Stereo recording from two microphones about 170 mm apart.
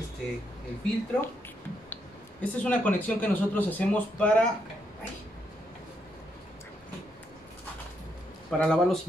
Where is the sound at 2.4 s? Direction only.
10° left (ahead or behind).